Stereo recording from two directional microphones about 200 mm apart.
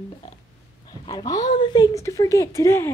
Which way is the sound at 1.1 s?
20° left (ahead or behind).